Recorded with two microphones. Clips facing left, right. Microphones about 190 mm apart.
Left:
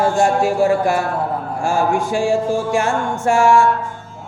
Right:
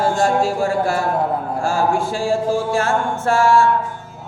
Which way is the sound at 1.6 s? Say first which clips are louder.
Left 2 dB; 15° left (ahead or behind).